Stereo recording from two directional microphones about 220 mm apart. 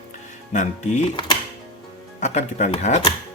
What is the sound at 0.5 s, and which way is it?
Speech, 30° left (ahead or behind).